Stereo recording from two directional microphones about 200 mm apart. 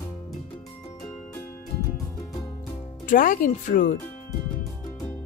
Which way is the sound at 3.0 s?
45° left (ahead or behind).